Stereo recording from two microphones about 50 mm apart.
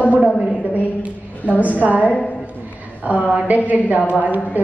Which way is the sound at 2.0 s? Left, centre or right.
Left.